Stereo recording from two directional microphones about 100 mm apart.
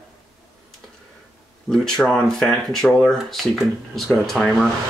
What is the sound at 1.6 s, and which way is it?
Speech, 5° left (ahead or behind).